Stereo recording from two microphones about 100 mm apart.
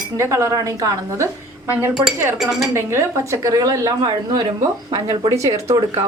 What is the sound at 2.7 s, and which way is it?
Speech, 25° right (ahead or behind).